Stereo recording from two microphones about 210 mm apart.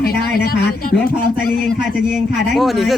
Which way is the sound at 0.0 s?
45° left (ahead or behind).